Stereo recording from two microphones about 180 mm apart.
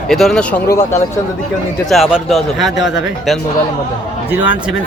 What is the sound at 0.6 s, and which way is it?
Speech, 15° left (ahead or behind).